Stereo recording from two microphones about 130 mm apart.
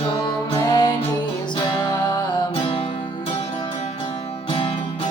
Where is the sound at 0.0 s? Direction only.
40° left (ahead or behind).